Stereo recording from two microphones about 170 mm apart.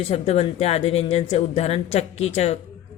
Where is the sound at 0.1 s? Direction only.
35° left (ahead or behind).